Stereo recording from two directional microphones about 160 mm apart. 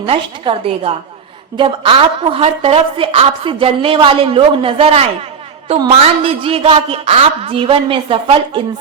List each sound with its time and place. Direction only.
0.0 s a woman's voice: 35° right (ahead or behind)